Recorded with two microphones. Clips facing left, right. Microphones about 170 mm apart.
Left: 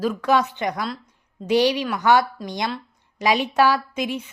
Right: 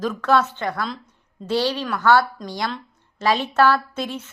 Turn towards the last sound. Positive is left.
turn(degrees=15)  # may be behind; listen again after turning